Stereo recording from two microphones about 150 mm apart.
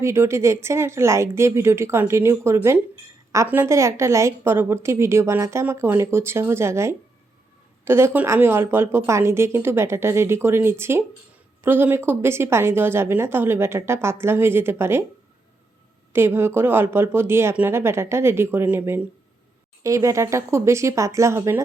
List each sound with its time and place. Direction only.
0.0 s a woman's voice: 20° right (ahead or behind)
16.1 s a woman's voice: 15° right (ahead or behind)